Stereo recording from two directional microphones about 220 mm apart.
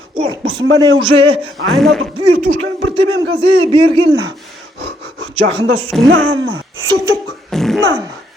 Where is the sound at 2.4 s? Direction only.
30° right (ahead or behind).